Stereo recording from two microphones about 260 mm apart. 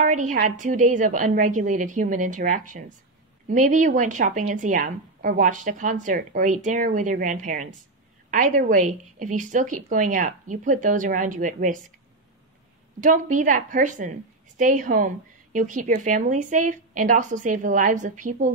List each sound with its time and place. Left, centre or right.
0.0 s a woman's voice: right
13.0 s a woman's voice: right